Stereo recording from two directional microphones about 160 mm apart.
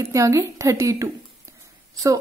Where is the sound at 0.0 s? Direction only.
20° right (ahead or behind).